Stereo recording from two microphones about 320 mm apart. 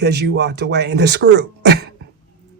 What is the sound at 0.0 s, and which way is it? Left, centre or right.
Speech, right.